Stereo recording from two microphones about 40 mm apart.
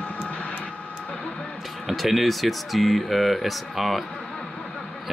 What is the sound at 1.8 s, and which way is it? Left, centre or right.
Speech, centre.